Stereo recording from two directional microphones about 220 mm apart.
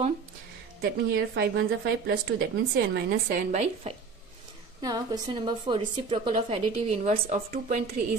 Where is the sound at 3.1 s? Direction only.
35° right (ahead or behind).